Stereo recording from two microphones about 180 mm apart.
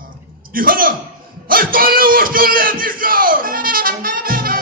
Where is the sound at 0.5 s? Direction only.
50° right (ahead or behind).